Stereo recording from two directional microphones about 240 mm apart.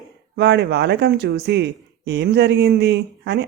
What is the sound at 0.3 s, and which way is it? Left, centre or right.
Speech, right.